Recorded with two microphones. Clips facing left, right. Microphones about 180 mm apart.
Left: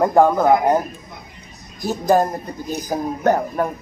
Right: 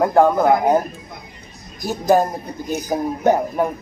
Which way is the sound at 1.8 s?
Centre (ahead or behind).